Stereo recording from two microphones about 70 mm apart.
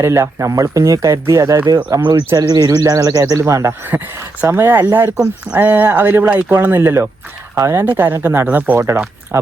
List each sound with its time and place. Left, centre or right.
0.0 s speech: right
1.6 s speech: right
3.2 s speech: right
3.7 s speech: right
7.5 s speech: right
7.9 s speech: right
9.3 s speech: right